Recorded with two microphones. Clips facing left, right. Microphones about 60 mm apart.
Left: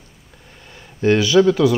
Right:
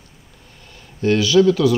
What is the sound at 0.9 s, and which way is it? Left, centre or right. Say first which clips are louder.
Speech: left 1 dB; left.